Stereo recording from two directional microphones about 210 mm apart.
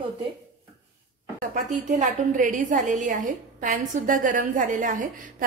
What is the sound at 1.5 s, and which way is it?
A woman's voice, 40° right (ahead or behind).